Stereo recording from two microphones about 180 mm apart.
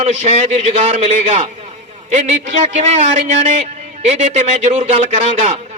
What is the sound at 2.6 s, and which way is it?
A man's voice, 40° right (ahead or behind).